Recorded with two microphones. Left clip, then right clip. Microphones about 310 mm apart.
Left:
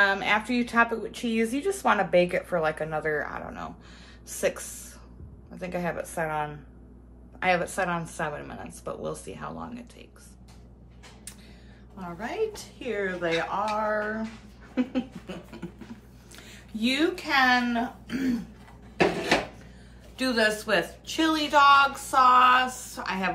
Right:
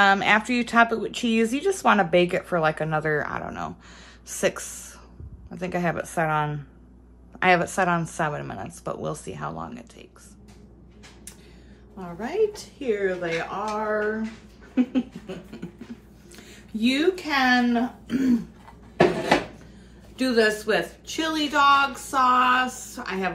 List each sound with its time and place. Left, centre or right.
0.0 s a woman's voice: right
12.0 s a woman's voice: centre
20.2 s a woman's voice: centre